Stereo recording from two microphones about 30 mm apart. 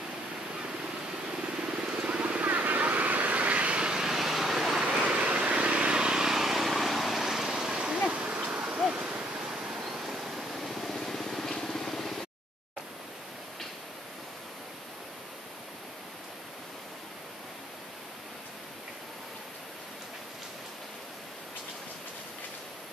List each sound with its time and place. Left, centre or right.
1.6 s vehicle: right
2.4 s vehicle: right
3.9 s waves: centre
4.9 s vehicle: right
6.2 s vehicle: centre
8.1 s a sound: right
9.5 s pink noise: centre
10.9 s vehicle: centre